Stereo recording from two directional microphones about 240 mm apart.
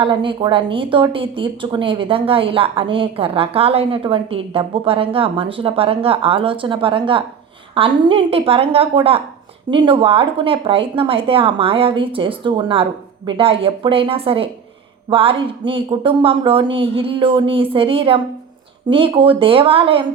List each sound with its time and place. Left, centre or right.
0.0 s speech: right